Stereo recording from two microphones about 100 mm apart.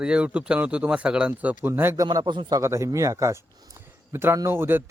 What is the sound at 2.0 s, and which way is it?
Speech, 45° right (ahead or behind).